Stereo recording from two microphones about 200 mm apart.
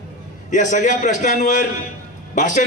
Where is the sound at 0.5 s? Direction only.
40° left (ahead or behind).